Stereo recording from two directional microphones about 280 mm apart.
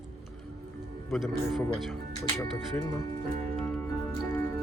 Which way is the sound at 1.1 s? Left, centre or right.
Centre.